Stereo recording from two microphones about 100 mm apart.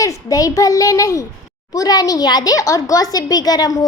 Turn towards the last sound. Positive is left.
turn(degrees=40)  # may be behind; listen again after turning